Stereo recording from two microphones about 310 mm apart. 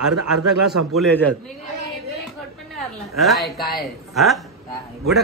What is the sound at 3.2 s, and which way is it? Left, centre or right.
A man's voice, centre.